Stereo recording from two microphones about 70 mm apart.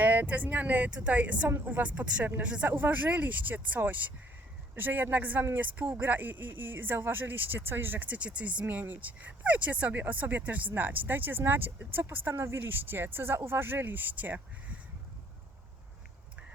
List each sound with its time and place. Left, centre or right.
0.0 s speech: right